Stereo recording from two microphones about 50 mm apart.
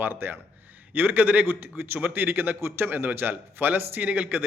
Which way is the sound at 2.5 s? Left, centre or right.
Right.